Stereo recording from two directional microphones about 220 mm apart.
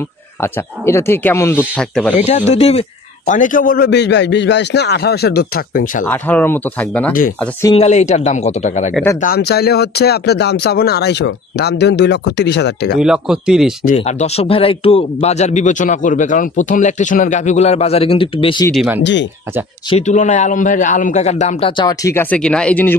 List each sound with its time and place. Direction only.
0.4 s speech: 10° left (ahead or behind)
2.1 s a man's voice: 30° left (ahead or behind)
6.0 s speech: 10° left (ahead or behind)
7.7 s speech: 30° left (ahead or behind)
9.2 s a man's voice: 45° left (ahead or behind)
12.9 s speech: 5° right (ahead or behind)
13.8 s speech: 30° left (ahead or behind)
18.7 s speech: 5° right (ahead or behind)
19.9 s speech: 30° left (ahead or behind); by 22.9 s 5° left (ahead or behind)